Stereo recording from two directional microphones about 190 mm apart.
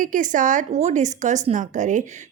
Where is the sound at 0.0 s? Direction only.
45° right (ahead or behind).